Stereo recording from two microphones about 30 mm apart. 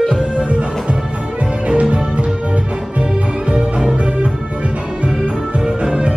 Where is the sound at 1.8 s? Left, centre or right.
Right.